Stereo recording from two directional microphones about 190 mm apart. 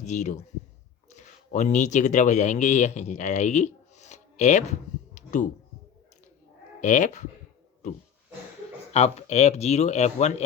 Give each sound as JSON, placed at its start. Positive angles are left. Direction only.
{"t": 0.0, "sound": "speech", "side_deg": 40}
{"t": 6.8, "sound": "speech", "side_deg": 40}
{"t": 8.9, "sound": "speech", "side_deg": 35}